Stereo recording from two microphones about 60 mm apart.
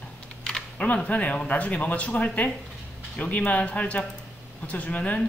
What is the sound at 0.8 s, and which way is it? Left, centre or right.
Speech, left.